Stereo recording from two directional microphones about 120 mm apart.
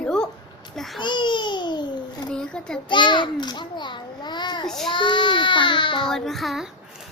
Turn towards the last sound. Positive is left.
turn(degrees=0)  # may be behind; listen again after turning